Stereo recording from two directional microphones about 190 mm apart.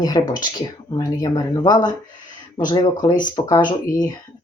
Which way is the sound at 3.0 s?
25° left (ahead or behind).